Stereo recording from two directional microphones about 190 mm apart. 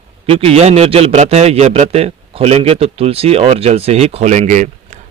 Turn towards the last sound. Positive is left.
turn(degrees=-40)  # may be behind; listen again after turning